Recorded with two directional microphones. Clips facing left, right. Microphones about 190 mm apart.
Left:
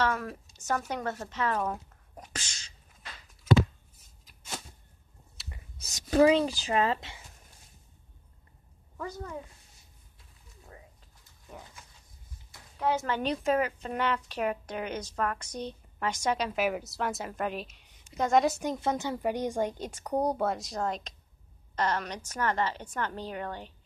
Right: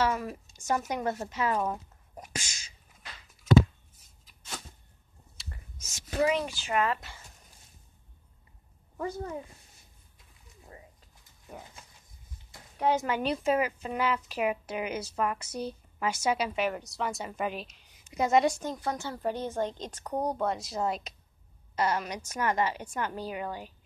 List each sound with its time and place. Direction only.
0.0 s speech: 5° right (ahead or behind)
5.8 s speech: 40° left (ahead or behind)
8.9 s a woman's voice: 25° right (ahead or behind)
12.7 s a woman's voice: 20° right (ahead or behind)
16.5 s a woman's voice: 5° left (ahead or behind)
18.6 s a woman's voice: 20° left (ahead or behind); by 23.7 s 10° right (ahead or behind)